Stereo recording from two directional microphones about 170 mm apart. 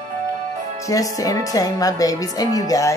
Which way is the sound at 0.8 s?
20° left (ahead or behind).